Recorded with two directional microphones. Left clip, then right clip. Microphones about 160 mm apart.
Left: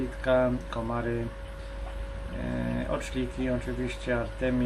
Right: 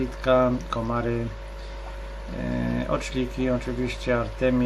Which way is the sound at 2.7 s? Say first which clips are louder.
Right 6 dB; 20° right (ahead or behind).